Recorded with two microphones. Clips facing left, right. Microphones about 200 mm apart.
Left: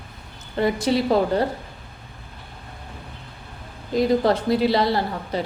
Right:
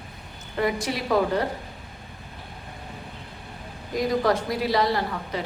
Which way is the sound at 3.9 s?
25° left (ahead or behind).